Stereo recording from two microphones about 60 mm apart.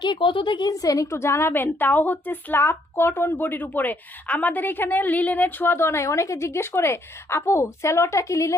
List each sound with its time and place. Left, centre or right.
0.7 s a woman's voice: left